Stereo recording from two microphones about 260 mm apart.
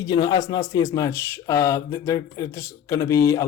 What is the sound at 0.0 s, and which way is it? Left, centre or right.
Speech, centre.